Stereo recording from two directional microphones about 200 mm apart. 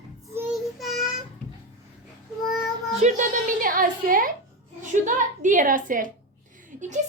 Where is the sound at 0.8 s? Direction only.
Centre (ahead or behind).